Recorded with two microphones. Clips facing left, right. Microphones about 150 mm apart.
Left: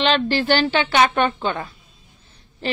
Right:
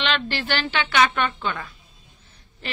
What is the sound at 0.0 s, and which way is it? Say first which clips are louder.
A woman's voice: left 7 dB; 35° left (ahead or behind).